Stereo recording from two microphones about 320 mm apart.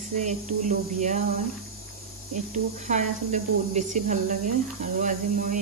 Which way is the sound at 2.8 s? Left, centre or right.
Right.